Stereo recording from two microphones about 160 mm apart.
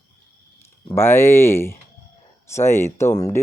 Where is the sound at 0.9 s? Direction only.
15° left (ahead or behind).